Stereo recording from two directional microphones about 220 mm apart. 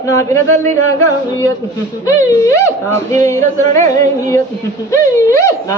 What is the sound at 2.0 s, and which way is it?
Speech, 15° left (ahead or behind).